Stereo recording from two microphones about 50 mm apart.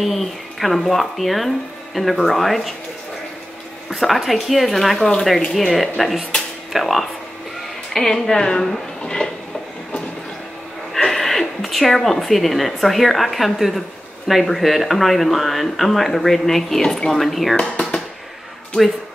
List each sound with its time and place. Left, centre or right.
0.0 s speech: centre
3.9 s speech: centre
7.9 s a woman's voice: centre
10.9 s speech: centre
17.6 s a sound: left